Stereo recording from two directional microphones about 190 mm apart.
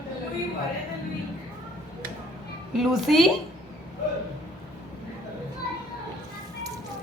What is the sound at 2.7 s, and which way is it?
Speech, centre (ahead or behind).